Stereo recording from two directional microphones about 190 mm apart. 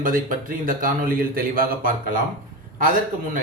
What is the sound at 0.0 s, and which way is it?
A man's voice, 45° right (ahead or behind).